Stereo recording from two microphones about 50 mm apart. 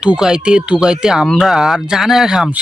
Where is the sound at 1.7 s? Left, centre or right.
Centre.